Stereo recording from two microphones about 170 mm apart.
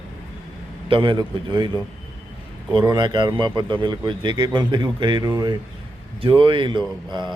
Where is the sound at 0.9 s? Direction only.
30° right (ahead or behind).